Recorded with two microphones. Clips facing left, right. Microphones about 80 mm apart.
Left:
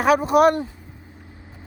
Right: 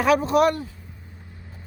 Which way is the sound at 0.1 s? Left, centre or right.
Centre.